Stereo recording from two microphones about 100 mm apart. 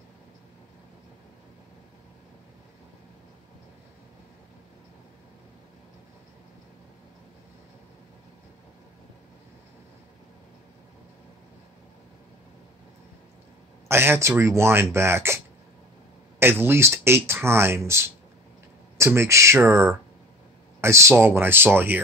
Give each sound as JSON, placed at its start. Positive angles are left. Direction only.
{"t": 13.8, "sound": "speech", "side_deg": -25}